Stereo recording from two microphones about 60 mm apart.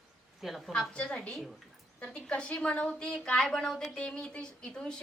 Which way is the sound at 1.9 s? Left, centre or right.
Centre.